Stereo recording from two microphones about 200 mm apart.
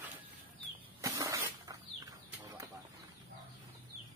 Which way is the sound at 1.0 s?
15° right (ahead or behind).